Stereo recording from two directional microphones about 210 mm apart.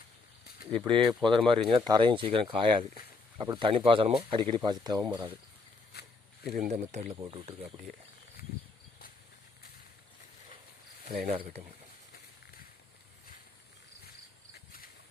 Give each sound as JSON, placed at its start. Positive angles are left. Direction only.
{"t": 0.9, "sound": "speech", "side_deg": -25}
{"t": 6.5, "sound": "speech", "side_deg": -35}
{"t": 8.4, "sound": "a sound", "side_deg": 45}
{"t": 11.1, "sound": "speech", "side_deg": -45}